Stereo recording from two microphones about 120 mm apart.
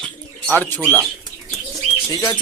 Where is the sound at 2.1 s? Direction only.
30° left (ahead or behind).